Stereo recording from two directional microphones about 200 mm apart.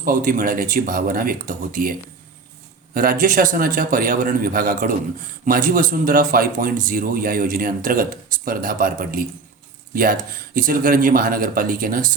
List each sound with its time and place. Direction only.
0.0 s speech: 45° right (ahead or behind)